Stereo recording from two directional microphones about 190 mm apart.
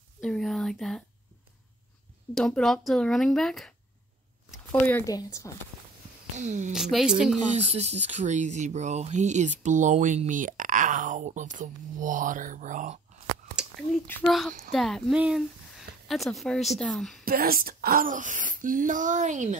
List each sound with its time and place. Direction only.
0.2 s speech: centre (ahead or behind)
2.3 s speech: centre (ahead or behind)
4.7 s speech: 10° left (ahead or behind)
6.3 s speech: 40° right (ahead or behind)
6.7 s speech: centre (ahead or behind)
7.3 s speech: 35° right (ahead or behind)
14.0 s speech: 10° left (ahead or behind)
17.2 s speech: 50° right (ahead or behind)